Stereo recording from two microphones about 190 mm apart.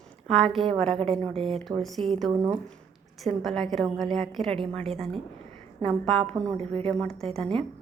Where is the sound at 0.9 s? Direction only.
30° right (ahead or behind).